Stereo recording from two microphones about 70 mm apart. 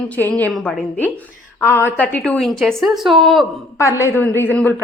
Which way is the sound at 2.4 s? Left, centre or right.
Centre.